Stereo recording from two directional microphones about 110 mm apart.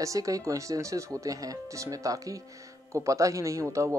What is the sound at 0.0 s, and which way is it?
A man's voice, 30° right (ahead or behind).